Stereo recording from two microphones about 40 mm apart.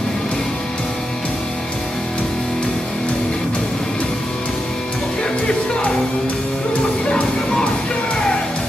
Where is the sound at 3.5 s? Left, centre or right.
Centre.